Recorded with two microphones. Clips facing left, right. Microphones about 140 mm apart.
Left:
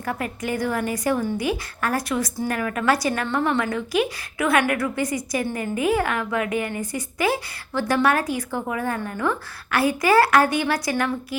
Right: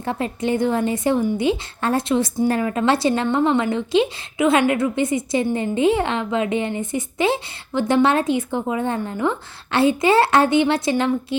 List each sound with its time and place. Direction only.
0.0 s a woman's voice: 25° right (ahead or behind)